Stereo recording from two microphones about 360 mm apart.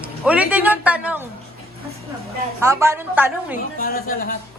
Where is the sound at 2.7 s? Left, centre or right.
Centre.